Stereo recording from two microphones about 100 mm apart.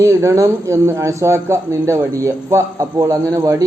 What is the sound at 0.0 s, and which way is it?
Speech, 30° right (ahead or behind).